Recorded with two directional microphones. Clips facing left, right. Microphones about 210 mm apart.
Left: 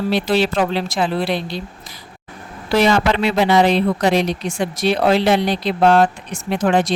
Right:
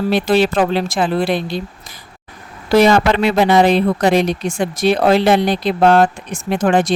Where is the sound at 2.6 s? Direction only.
45° right (ahead or behind).